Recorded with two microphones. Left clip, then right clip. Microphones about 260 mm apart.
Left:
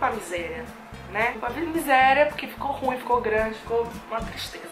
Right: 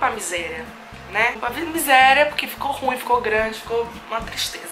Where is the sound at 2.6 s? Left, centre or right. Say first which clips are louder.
Right 2 dB; left.